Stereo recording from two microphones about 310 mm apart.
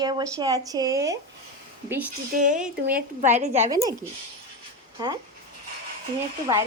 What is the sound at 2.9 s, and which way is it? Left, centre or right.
Speech, right.